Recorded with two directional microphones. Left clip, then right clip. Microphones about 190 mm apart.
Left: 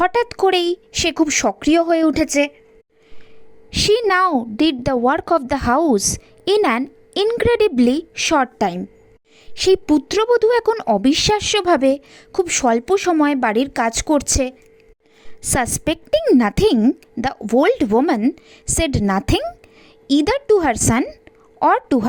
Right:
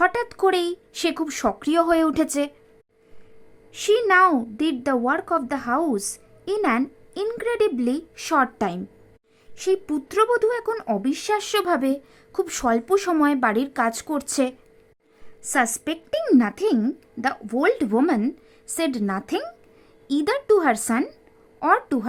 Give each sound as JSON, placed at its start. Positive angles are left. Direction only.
{"t": 0.0, "sound": "a woman's voice", "side_deg": 30}
{"t": 3.7, "sound": "a woman's voice", "side_deg": 35}